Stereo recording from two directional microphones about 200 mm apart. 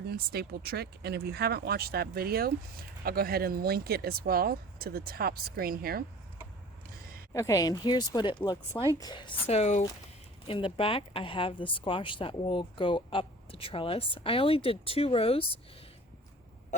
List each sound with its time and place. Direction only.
0.1 s speech: 50° right (ahead or behind)
7.3 s speech: 15° left (ahead or behind)